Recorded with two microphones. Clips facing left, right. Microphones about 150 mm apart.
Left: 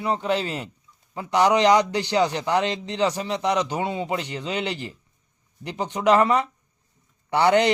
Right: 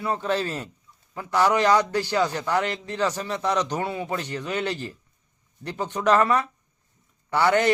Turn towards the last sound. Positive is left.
turn(degrees=20)  # may be behind; listen again after turning